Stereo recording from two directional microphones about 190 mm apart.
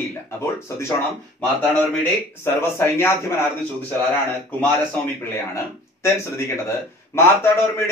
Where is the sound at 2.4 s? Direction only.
10° left (ahead or behind).